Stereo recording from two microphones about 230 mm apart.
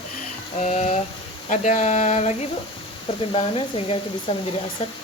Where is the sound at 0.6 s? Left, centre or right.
Left.